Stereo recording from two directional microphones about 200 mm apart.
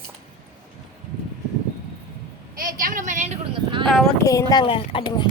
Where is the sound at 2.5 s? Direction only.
45° right (ahead or behind).